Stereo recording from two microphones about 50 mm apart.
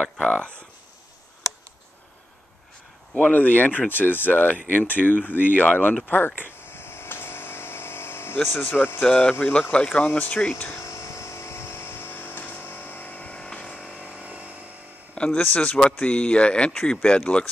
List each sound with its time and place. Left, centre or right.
0.0 s speech: left
3.2 s speech: left
6.0 s a sound: left
8.5 s speech: left
9.5 s speech: left
10.0 s speech: left
10.8 s vehicle: left
13.9 s a sound: right
15.1 s speech: left
15.4 s speech: left
16.0 s speech: left